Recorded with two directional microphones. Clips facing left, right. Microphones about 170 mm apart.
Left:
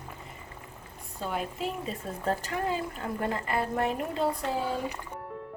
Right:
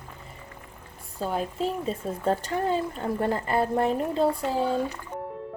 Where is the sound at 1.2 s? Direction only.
35° right (ahead or behind).